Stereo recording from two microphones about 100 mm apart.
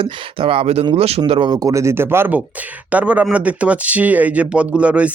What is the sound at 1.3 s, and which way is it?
A man's voice, 55° right (ahead or behind).